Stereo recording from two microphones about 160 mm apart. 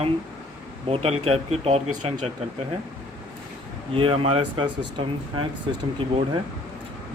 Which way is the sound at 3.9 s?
35° right (ahead or behind).